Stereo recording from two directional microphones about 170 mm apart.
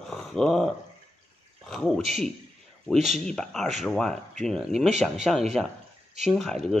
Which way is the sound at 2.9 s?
40° right (ahead or behind).